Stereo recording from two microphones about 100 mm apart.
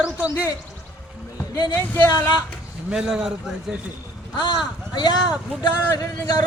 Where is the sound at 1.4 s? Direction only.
40° left (ahead or behind).